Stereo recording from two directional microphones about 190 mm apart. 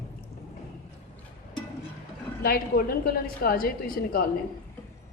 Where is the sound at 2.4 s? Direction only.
55° left (ahead or behind).